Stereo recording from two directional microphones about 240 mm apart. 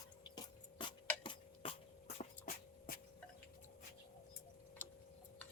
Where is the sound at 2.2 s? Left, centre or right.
Left.